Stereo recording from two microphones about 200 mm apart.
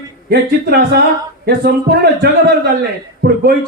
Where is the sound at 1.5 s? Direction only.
50° right (ahead or behind).